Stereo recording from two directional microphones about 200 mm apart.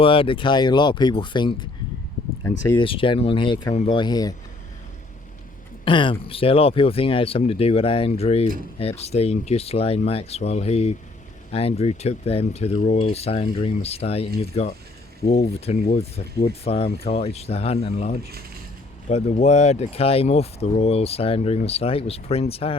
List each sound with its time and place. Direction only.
0.0 s speech: 25° left (ahead or behind)
5.8 s speech: 25° left (ahead or behind)